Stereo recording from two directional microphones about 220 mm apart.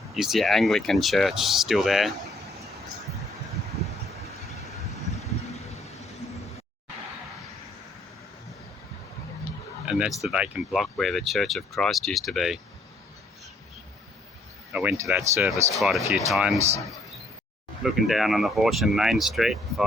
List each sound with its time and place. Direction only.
0.1 s speech: centre (ahead or behind)
9.8 s a sound: 5° right (ahead or behind)
10.2 s speech: centre (ahead or behind)
14.7 s speech: 5° right (ahead or behind)
16.6 s speech: 30° right (ahead or behind)
18.0 s speech: centre (ahead or behind)